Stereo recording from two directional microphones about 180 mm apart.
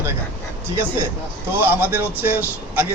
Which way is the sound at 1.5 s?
10° right (ahead or behind).